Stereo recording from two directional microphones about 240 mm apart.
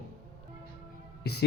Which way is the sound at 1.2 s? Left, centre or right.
Left.